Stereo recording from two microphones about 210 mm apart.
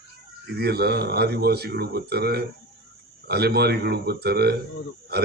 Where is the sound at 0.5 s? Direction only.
50° right (ahead or behind).